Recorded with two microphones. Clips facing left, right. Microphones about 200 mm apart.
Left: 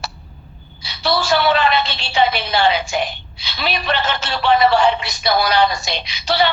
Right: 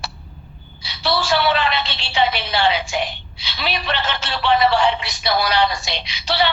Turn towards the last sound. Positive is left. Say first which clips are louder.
# left 3 dB
turn(degrees=45)  # may be behind; listen again after turning